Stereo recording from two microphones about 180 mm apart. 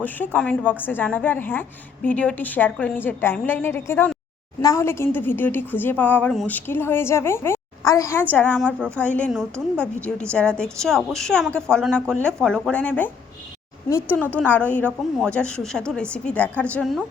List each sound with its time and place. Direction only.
0.0 s a woman's voice: 10° left (ahead or behind)